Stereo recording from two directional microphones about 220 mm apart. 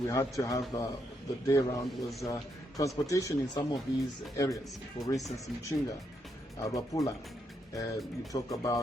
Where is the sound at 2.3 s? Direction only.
15° left (ahead or behind).